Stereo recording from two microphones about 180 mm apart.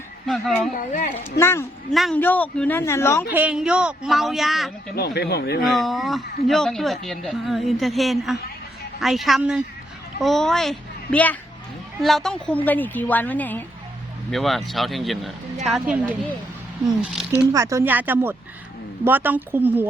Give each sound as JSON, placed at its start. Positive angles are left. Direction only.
{"t": 0.3, "sound": "speech", "side_deg": 0}
{"t": 0.8, "sound": "speech", "side_deg": 45}
{"t": 1.2, "sound": "a woman's voice", "side_deg": 15}
{"t": 1.9, "sound": "a woman's voice", "side_deg": 0}
{"t": 3.3, "sound": "speech", "side_deg": -5}
{"t": 4.9, "sound": "speech", "side_deg": 65}
{"t": 5.6, "sound": "a child's voice", "side_deg": 0}
{"t": 17.5, "sound": "speech", "side_deg": -15}